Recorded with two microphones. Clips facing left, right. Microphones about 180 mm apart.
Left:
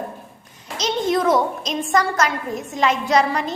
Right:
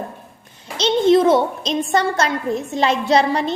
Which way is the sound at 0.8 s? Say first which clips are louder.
Right 7 dB; 30° right (ahead or behind).